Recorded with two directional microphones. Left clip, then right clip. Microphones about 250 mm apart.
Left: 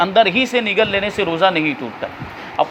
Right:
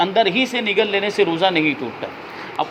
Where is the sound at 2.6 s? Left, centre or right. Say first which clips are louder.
Left 5 dB; left.